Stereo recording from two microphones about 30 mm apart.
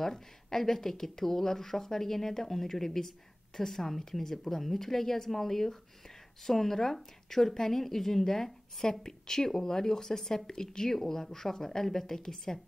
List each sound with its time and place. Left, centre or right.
0.0 s a woman's voice: centre